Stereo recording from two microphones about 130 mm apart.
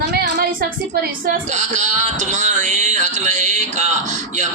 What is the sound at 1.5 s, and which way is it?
Speech, 65° right (ahead or behind).